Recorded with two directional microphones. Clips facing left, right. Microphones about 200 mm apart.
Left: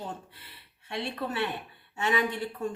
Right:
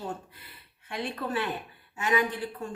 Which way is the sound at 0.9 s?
25° left (ahead or behind).